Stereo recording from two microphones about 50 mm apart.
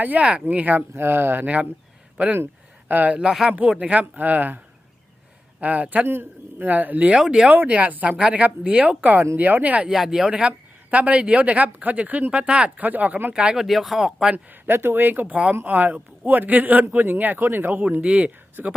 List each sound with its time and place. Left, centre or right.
0.0 s a man's voice: right
0.9 s speech: right
2.9 s a man's voice: right
6.1 s a man's voice: right
7.1 s speech: centre
7.5 s a man's voice: right
9.9 s speech: centre
10.9 s speech: right
12.8 s a man's voice: right
13.3 s speech: centre
13.7 s speech: centre
14.3 s a man's voice: right
18.0 s speech: right
18.6 s a man's voice: right